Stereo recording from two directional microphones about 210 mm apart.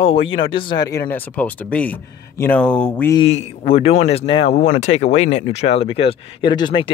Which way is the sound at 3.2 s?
30° left (ahead or behind).